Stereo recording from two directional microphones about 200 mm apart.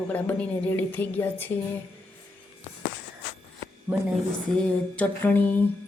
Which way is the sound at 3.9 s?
5° right (ahead or behind).